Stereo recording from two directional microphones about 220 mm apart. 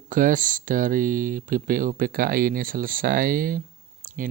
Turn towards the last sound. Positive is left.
turn(degrees=-40)  # may be behind; listen again after turning